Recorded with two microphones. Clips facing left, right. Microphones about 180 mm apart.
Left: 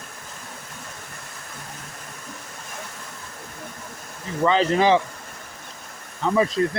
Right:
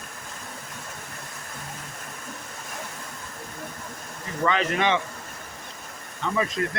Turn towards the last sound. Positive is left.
turn(degrees=30)  # may be behind; listen again after turning